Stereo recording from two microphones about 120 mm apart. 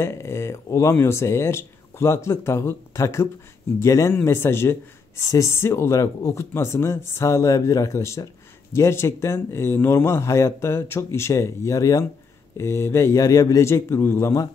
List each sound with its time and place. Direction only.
0.0 s a man's voice: 25° left (ahead or behind)